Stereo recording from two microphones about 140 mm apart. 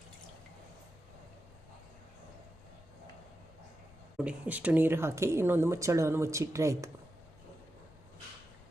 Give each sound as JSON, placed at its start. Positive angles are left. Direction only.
{"t": 4.2, "sound": "speech", "side_deg": -10}